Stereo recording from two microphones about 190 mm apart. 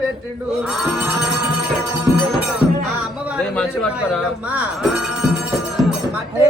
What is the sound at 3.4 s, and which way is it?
Speech, 5° left (ahead or behind).